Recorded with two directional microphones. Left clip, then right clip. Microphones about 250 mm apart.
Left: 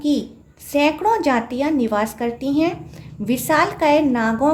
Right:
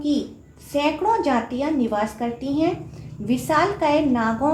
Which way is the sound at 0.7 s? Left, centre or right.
Left.